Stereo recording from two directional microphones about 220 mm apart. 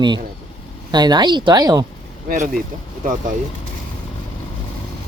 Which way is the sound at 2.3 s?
40° right (ahead or behind).